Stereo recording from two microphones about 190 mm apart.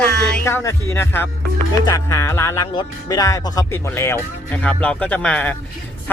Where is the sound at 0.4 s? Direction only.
15° left (ahead or behind).